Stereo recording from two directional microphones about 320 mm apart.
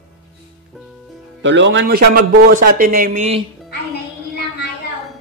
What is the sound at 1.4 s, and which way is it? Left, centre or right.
A man's voice, right.